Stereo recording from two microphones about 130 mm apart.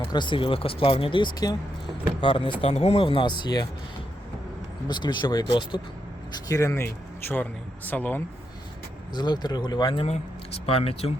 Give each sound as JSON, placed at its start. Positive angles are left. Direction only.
{"t": 0.1, "sound": "speech", "side_deg": 35}
{"t": 4.9, "sound": "speech", "side_deg": 35}
{"t": 6.3, "sound": "speech", "side_deg": 25}
{"t": 9.1, "sound": "speech", "side_deg": 35}
{"t": 10.7, "sound": "speech", "side_deg": 50}